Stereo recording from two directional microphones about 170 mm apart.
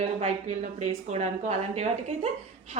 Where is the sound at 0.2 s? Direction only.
40° right (ahead or behind).